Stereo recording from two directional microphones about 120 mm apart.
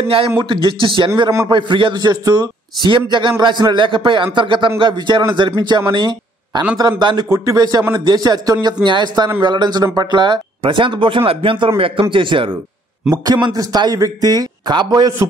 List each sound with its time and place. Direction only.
0.4 s a man's voice: 45° right (ahead or behind)
5.9 s a sound: 40° right (ahead or behind)
6.8 s a man's voice: 35° right (ahead or behind)
13.1 s a man's voice: 35° right (ahead or behind)